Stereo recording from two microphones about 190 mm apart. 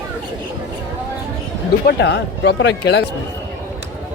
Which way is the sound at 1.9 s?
65° left (ahead or behind).